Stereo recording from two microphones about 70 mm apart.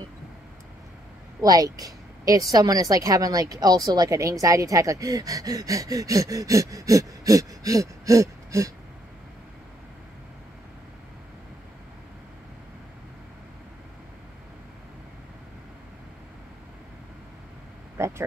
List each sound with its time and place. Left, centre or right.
1.4 s a woman's voice: right
17.9 s vehicle: right